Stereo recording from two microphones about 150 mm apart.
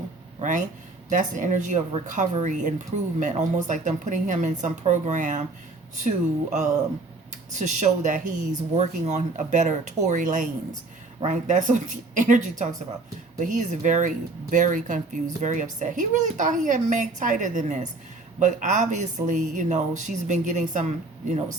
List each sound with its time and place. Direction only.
1.1 s a woman's voice: 60° right (ahead or behind)